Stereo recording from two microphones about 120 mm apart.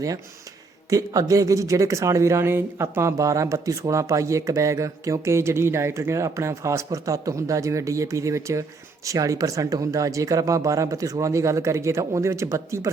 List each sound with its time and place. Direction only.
0.9 s speech: 30° right (ahead or behind)